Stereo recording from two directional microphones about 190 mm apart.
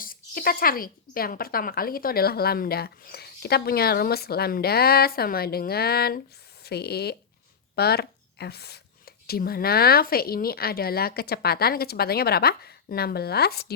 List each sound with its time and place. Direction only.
0.0 s speech: 50° left (ahead or behind)